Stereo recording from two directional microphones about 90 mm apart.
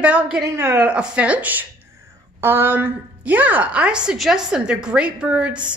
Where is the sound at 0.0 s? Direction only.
15° right (ahead or behind).